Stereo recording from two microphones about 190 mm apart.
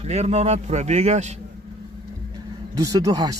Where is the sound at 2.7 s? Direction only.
20° right (ahead or behind).